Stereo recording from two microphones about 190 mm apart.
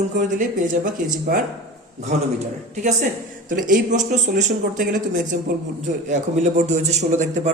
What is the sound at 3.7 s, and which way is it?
A man's voice, 40° right (ahead or behind).